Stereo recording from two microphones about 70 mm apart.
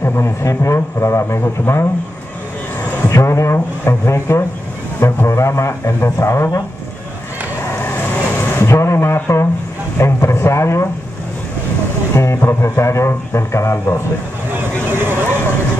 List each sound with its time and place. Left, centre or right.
0.0 s a man's voice: left
3.1 s a man's voice: left
7.7 s vehicle: left
9.9 s a man's voice: left
12.2 s a man's voice: left
14.9 s vehicle: right